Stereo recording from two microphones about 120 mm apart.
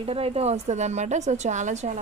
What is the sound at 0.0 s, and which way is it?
A woman's voice, 55° right (ahead or behind).